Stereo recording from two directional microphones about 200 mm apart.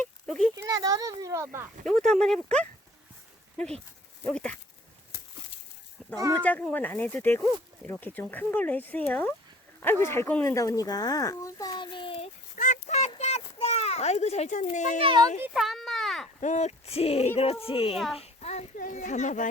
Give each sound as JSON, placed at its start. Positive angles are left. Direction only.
{"t": 0.0, "sound": "a sound", "side_deg": 0}
{"t": 0.5, "sound": "a child's voice", "side_deg": -20}
{"t": 1.9, "sound": "speech", "side_deg": 0}
{"t": 4.3, "sound": "speech", "side_deg": 5}
{"t": 6.0, "sound": "a sound", "side_deg": 0}
{"t": 6.4, "sound": "speech", "side_deg": 10}
{"t": 12.5, "sound": "a sound", "side_deg": 40}
{"t": 15.0, "sound": "speech", "side_deg": -20}
{"t": 15.4, "sound": "a sound", "side_deg": -5}
{"t": 16.4, "sound": "a child's voice", "side_deg": 35}
{"t": 17.9, "sound": "speech", "side_deg": 0}
{"t": 18.2, "sound": "a child's voice", "side_deg": 35}